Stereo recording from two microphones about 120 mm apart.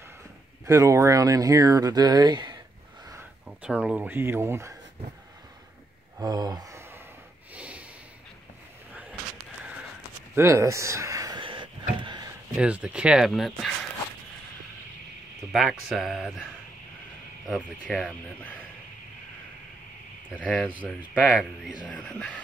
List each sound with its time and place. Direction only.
0.7 s speech: 25° right (ahead or behind)
3.8 s speech: 10° right (ahead or behind)
6.1 s a sound: 35° right (ahead or behind)
7.5 s snort: 10° right (ahead or behind)
10.3 s speech: 25° right (ahead or behind)
11.3 s a sound: 45° right (ahead or behind)
12.5 s speech: 10° right (ahead or behind)
15.5 s speech: 5° right (ahead or behind)
17.8 s speech: centre (ahead or behind)
20.4 s speech: 5° left (ahead or behind)
21.3 s speech: centre (ahead or behind)